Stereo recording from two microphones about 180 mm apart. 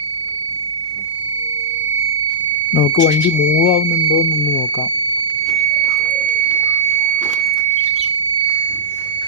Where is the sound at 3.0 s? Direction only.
45° left (ahead or behind).